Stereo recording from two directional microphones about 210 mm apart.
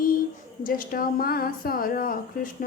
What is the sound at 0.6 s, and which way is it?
Speech, 40° left (ahead or behind).